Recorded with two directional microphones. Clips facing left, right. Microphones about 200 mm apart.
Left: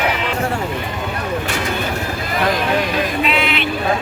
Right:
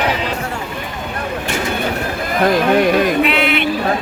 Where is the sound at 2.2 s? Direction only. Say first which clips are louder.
Right 5 dB; 50° right (ahead or behind).